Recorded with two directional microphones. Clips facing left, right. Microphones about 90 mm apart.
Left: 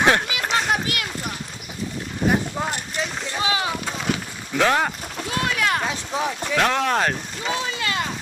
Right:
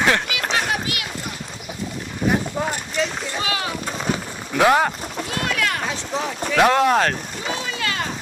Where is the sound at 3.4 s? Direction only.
25° left (ahead or behind).